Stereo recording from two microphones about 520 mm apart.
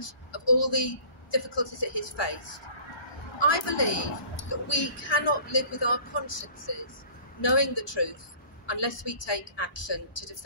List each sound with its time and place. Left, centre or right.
0.0 s a woman's voice: left